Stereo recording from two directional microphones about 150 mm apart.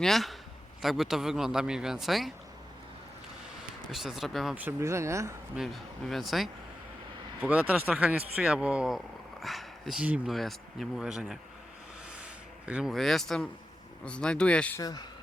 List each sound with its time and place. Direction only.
0.0 s speech: centre (ahead or behind)
3.9 s speech: centre (ahead or behind)
4.5 s speech: 15° right (ahead or behind)
5.5 s speech: centre (ahead or behind)
12.1 s a sound: 10° right (ahead or behind)
14.0 s speech: 5° left (ahead or behind)
14.8 s speech: 25° left (ahead or behind)